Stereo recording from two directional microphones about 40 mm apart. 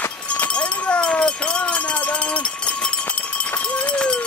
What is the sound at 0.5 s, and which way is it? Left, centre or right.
Run, left.